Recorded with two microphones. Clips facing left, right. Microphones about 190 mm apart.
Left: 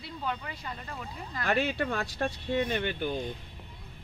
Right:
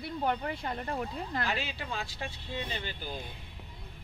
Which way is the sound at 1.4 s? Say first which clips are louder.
Left 9 dB; 60° left (ahead or behind).